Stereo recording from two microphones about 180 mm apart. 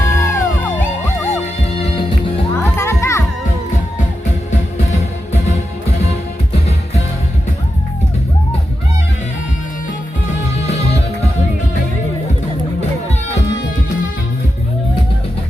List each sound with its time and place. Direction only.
0.0 s music: 15° left (ahead or behind)
1.8 s music: 30° left (ahead or behind)
2.5 s music: 15° left (ahead or behind)